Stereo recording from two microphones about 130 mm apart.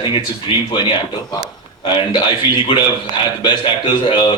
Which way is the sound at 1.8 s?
40° left (ahead or behind).